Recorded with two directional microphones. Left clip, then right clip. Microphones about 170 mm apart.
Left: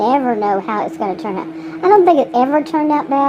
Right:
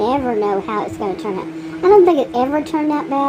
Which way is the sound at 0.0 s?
25° left (ahead or behind).